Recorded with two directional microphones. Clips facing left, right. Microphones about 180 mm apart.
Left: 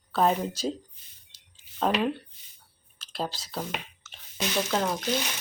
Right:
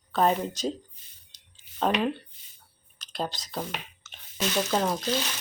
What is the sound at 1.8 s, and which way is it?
Speech, centre (ahead or behind).